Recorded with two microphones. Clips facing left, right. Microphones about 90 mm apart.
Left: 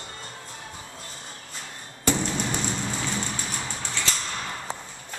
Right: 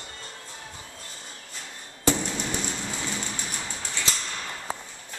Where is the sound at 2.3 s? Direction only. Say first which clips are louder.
Left 3 dB; 15° left (ahead or behind).